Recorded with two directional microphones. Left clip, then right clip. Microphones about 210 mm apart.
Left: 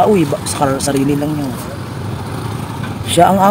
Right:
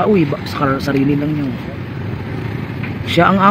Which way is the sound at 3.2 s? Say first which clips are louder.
Left 3 dB; 15° right (ahead or behind).